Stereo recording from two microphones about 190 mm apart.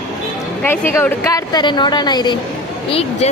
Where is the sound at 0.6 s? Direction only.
10° left (ahead or behind); by 3.3 s 30° left (ahead or behind).